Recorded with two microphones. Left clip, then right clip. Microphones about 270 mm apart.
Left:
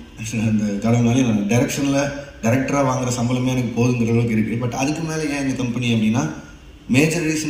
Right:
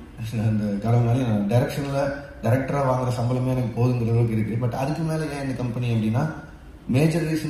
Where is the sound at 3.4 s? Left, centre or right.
Right.